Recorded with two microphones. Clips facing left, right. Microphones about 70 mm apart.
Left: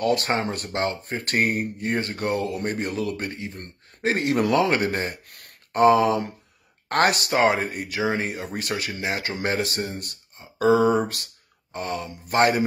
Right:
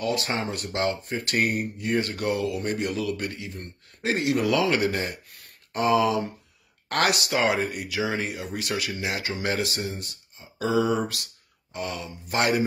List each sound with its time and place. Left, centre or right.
0.0 s speech: left